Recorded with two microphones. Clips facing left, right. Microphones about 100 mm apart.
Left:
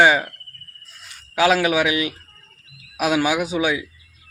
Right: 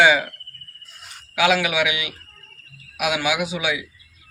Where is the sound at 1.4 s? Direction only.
40° left (ahead or behind).